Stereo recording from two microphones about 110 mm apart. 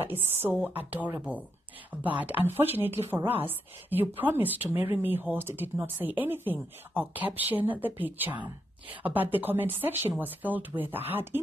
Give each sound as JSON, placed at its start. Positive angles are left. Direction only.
{"t": 0.0, "sound": "speech", "side_deg": -20}